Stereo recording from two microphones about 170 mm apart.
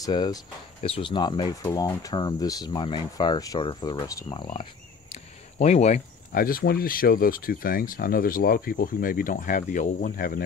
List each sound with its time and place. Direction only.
0.0 s speech: 25° left (ahead or behind)
5.1 s a sound: 40° left (ahead or behind)
6.3 s speech: 55° left (ahead or behind)